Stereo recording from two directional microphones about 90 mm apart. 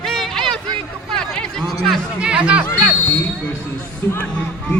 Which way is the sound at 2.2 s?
10° right (ahead or behind).